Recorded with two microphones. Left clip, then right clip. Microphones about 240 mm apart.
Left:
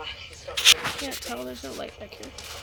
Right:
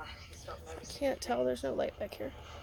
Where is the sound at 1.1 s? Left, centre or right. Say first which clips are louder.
Right 2 dB; right.